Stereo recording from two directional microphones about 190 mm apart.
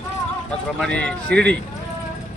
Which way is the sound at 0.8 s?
5° left (ahead or behind).